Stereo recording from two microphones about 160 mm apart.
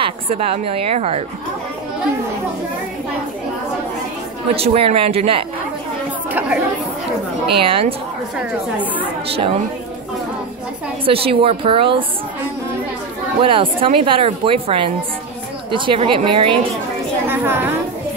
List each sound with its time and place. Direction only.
0.0 s speech: 40° right (ahead or behind)
4.6 s speech: 35° right (ahead or behind)
7.4 s speech: 35° right (ahead or behind)
8.4 s speech: 10° right (ahead or behind)
9.3 s speech: 35° right (ahead or behind)
11.1 s speech: 35° right (ahead or behind)
13.4 s speech: 35° right (ahead or behind)
17.3 s a woman's voice: 15° right (ahead or behind)